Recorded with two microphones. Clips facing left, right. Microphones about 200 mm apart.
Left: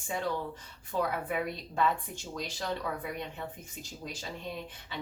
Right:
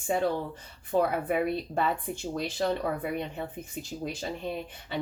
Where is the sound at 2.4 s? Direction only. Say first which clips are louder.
Right 8 dB; 60° right (ahead or behind).